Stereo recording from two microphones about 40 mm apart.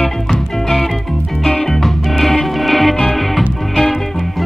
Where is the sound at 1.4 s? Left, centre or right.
Centre.